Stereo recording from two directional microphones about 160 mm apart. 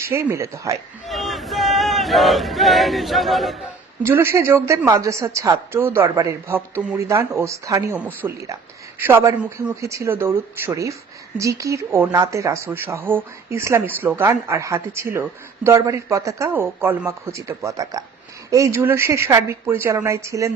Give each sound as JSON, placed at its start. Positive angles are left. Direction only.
{"t": 0.0, "sound": "speech", "side_deg": -15}
{"t": 1.0, "sound": "speech", "side_deg": 0}
{"t": 4.0, "sound": "speech", "side_deg": -15}